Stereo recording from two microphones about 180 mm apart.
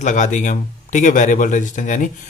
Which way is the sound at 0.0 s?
45° left (ahead or behind).